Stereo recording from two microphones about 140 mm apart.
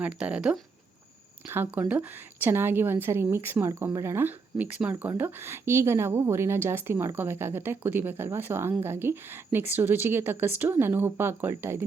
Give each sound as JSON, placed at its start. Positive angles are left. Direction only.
{"t": 0.0, "sound": "a woman's voice", "side_deg": -5}